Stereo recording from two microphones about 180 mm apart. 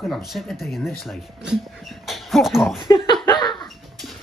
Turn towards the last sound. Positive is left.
turn(degrees=0)  # may be behind; listen again after turning